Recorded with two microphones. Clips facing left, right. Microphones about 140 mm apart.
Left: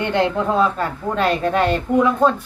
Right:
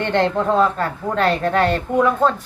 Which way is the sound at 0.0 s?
10° left (ahead or behind).